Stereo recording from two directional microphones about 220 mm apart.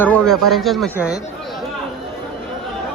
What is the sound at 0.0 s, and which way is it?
A man's voice, 5° left (ahead or behind).